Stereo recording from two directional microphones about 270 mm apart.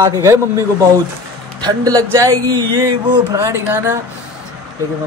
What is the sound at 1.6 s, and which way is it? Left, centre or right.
Speech, centre.